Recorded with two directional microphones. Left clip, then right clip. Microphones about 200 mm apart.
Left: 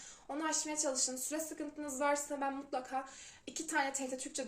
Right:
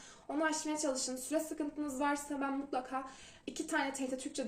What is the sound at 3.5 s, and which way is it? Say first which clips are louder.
Speech: even; 5° left (ahead or behind).